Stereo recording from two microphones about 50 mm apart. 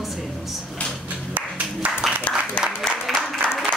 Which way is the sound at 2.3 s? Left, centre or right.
Left.